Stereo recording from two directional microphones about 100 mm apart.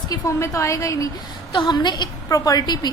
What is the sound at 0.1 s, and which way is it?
A woman's voice, 30° left (ahead or behind).